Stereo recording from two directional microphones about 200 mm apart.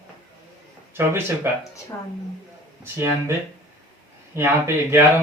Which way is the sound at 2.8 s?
10° right (ahead or behind).